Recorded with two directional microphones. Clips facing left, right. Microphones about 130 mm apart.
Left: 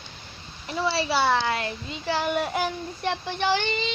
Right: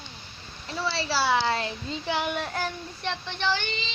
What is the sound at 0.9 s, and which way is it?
Speech, 20° left (ahead or behind).